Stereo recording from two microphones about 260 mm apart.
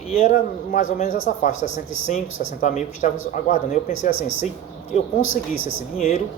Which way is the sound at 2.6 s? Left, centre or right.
Left.